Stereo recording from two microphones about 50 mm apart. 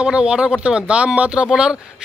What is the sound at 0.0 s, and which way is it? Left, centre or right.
Speech, right.